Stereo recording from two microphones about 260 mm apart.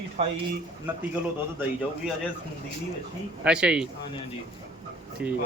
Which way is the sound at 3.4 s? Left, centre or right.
Centre.